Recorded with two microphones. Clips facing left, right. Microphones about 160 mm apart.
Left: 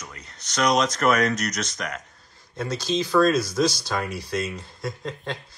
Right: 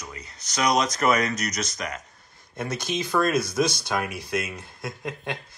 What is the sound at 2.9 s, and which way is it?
Speech, 65° right (ahead or behind).